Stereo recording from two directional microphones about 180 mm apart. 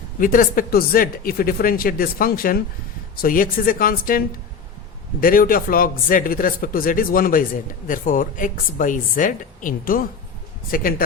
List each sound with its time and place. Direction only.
0.2 s speech: 50° left (ahead or behind)
5.2 s speech: 50° left (ahead or behind)